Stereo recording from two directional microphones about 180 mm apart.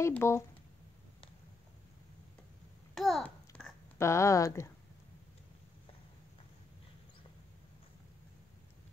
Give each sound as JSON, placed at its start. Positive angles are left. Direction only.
{"t": 0.0, "sound": "speech", "side_deg": 15}
{"t": 2.9, "sound": "babbling", "side_deg": 0}
{"t": 4.0, "sound": "speech", "side_deg": 15}